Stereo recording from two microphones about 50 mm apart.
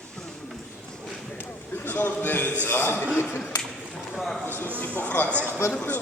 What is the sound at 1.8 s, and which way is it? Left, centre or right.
A man's voice, left.